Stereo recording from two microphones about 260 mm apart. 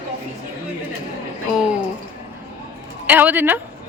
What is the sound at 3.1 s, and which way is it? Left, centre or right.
Speech, centre.